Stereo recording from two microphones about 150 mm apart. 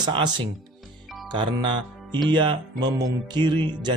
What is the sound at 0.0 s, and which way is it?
Speech, 30° right (ahead or behind).